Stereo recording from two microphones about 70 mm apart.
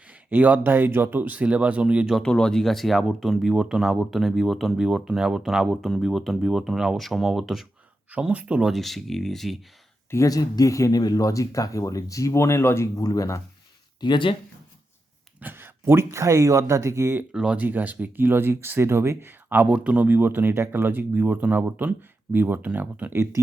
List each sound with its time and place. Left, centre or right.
0.1 s speech: right
2.2 s speech: centre
8.3 s speech: centre
8.7 s speech: centre
10.2 s speech: left
13.0 s speech: left
14.0 s speech: left
15.4 s speech: right
17.3 s speech: centre
17.6 s speech: right
20.1 s speech: right
23.1 s speech: right